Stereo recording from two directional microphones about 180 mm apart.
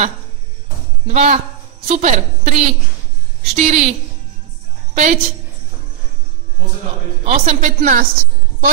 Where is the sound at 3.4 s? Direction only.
40° right (ahead or behind).